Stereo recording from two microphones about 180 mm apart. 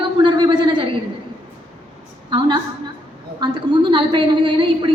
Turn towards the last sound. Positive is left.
turn(degrees=-25)  # may be behind; listen again after turning